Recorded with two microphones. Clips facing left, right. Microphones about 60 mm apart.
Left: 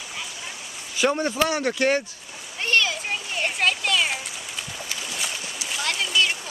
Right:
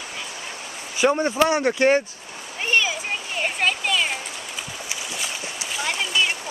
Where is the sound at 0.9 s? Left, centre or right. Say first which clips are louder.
Right 3 dB; centre.